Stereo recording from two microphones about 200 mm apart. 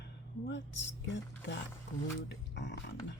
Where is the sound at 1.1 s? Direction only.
65° left (ahead or behind).